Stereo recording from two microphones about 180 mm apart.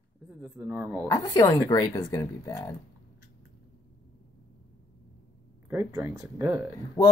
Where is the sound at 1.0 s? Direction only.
20° left (ahead or behind).